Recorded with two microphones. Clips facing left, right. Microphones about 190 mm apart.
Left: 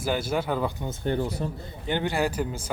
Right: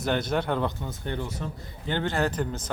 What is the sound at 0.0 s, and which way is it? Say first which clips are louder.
Speech: even; 5° left (ahead or behind).